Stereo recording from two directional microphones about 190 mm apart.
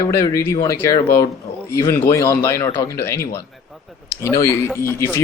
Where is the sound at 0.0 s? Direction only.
15° left (ahead or behind).